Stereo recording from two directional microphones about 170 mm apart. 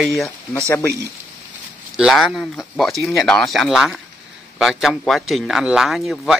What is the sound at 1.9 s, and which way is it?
A man's voice, centre (ahead or behind).